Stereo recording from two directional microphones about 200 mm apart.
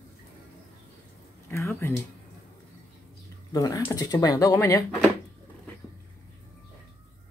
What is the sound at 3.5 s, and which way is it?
Speech, 15° left (ahead or behind).